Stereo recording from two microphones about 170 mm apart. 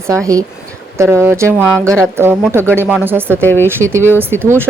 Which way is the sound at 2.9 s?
10° right (ahead or behind).